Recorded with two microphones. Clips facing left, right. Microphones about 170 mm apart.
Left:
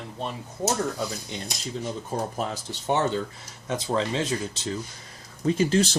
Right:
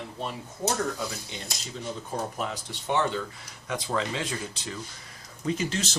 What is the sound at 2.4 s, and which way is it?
Speech, 30° left (ahead or behind).